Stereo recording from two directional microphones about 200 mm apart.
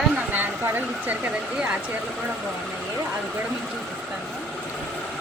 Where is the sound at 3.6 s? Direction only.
Centre (ahead or behind).